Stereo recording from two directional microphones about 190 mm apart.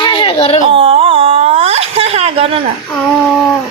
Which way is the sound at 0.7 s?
25° right (ahead or behind).